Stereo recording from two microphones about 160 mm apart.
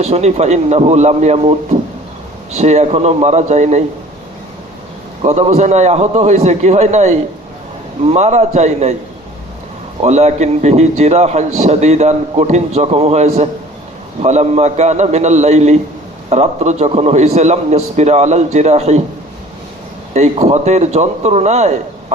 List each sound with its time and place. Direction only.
0.0 s a man's voice: 45° right (ahead or behind)
5.2 s a man's voice: 45° right (ahead or behind)
10.0 s a man's voice: 45° right (ahead or behind)
20.1 s a man's voice: 45° right (ahead or behind)